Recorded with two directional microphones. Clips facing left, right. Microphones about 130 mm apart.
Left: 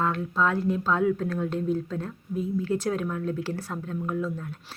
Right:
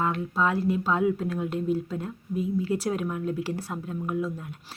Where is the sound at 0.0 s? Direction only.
10° right (ahead or behind).